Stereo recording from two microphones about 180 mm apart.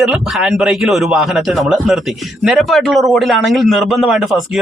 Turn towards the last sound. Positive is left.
turn(degrees=0)  # may be behind; listen again after turning